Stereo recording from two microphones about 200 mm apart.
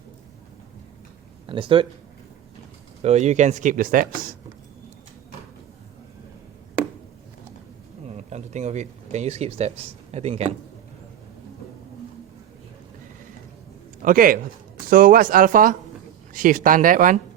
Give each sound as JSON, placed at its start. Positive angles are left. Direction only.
{"t": 1.5, "sound": "speech", "side_deg": -25}
{"t": 3.0, "sound": "speech", "side_deg": -35}
{"t": 8.1, "sound": "speech", "side_deg": -35}
{"t": 14.0, "sound": "speech", "side_deg": -45}